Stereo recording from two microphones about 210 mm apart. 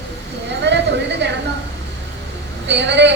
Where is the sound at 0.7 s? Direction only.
55° right (ahead or behind).